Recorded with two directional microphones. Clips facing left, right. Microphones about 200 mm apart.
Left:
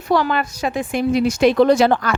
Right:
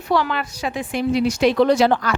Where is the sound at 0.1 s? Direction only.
45° left (ahead or behind).